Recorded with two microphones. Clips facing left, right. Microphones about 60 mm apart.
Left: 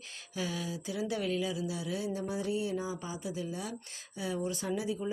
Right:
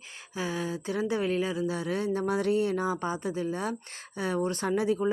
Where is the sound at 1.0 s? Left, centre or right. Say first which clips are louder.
Right 4 dB; right.